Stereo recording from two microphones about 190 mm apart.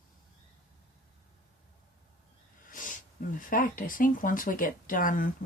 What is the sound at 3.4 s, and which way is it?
Speech, 45° left (ahead or behind).